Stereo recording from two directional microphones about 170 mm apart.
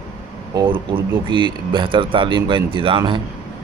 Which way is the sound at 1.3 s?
30° right (ahead or behind).